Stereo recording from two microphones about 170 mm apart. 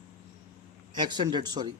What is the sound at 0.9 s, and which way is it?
Speech, 25° right (ahead or behind).